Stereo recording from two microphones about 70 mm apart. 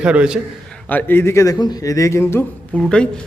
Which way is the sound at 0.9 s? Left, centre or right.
Left.